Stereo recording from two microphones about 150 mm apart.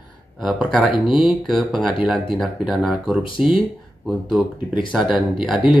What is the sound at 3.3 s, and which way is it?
Mantra, 35° left (ahead or behind).